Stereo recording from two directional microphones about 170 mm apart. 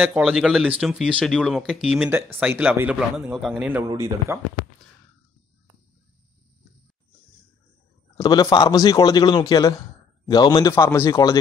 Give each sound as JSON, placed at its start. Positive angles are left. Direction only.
{"t": 0.0, "sound": "speech", "side_deg": -5}
{"t": 3.6, "sound": "a man's voice", "side_deg": -15}
{"t": 8.2, "sound": "a man's voice", "side_deg": 25}